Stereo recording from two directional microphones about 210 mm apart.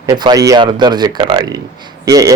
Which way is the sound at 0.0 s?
20° right (ahead or behind).